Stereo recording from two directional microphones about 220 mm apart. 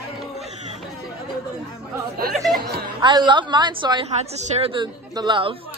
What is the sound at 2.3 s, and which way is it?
Chatter, centre (ahead or behind).